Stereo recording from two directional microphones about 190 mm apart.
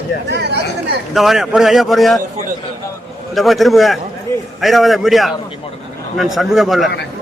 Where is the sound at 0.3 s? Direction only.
60° right (ahead or behind).